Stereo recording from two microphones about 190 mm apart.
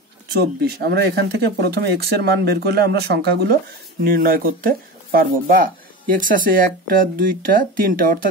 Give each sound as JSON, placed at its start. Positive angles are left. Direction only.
{"t": 0.6, "sound": "speech", "side_deg": -55}